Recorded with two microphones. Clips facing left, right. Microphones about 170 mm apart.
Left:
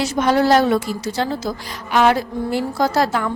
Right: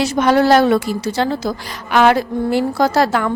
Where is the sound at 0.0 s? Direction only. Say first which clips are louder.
Right 3 dB; 70° right (ahead or behind).